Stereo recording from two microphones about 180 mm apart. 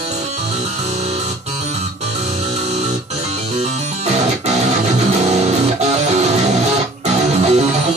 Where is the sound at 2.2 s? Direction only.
40° right (ahead or behind).